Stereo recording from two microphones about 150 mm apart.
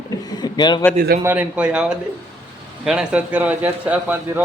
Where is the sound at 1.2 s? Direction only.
10° right (ahead or behind).